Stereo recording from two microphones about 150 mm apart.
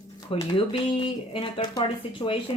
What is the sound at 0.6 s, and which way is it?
Speech, 35° left (ahead or behind).